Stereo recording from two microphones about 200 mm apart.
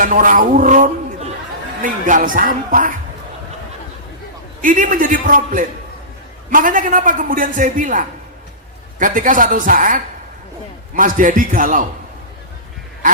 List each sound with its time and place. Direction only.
0.0 s speech: 40° right (ahead or behind)
4.6 s a man's voice: 40° right (ahead or behind)